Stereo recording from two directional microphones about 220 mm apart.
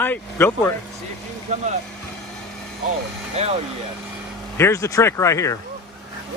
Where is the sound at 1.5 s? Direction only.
30° right (ahead or behind).